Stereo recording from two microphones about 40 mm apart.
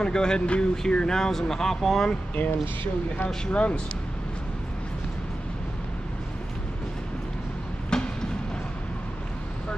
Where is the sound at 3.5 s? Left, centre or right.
Left.